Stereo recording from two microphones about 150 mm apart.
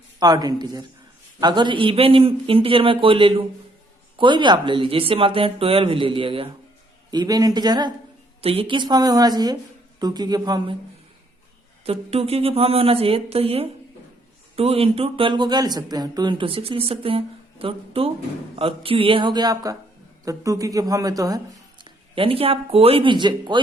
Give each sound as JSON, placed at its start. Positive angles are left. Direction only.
{"t": 0.2, "sound": "a woman's voice", "side_deg": -25}
{"t": 7.1, "sound": "a woman's voice", "side_deg": -25}
{"t": 8.4, "sound": "a woman's voice", "side_deg": -40}
{"t": 11.9, "sound": "a man's voice", "side_deg": -40}
{"t": 22.1, "sound": "speech", "side_deg": -40}